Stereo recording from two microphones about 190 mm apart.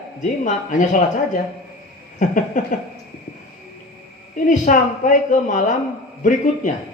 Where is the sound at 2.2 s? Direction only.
45° left (ahead or behind).